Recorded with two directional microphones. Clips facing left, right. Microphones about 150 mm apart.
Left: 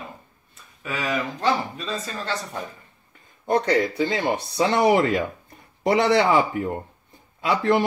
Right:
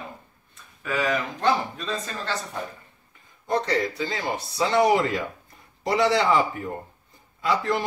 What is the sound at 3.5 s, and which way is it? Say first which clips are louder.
Speech: left 4 dB; 55° left (ahead or behind).